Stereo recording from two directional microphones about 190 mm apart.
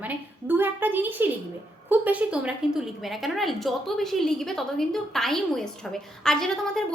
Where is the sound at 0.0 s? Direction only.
10° right (ahead or behind).